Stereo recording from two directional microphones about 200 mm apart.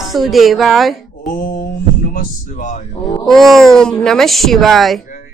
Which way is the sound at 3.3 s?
Centre (ahead or behind).